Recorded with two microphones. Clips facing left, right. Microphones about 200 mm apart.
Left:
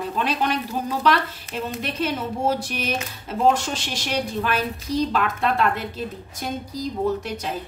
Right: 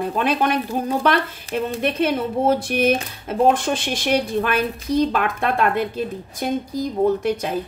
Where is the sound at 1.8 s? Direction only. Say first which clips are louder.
Right 6 dB; 55° right (ahead or behind).